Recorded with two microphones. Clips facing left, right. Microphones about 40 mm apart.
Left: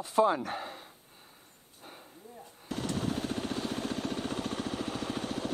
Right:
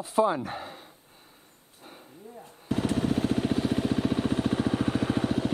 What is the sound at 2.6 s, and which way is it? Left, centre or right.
Vehicle, centre.